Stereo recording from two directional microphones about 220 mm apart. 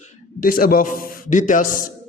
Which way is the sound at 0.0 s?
40° left (ahead or behind).